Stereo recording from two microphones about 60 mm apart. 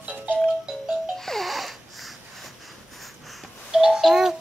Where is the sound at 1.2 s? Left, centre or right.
Centre.